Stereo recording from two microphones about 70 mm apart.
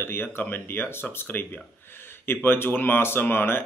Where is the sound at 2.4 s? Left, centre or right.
Left.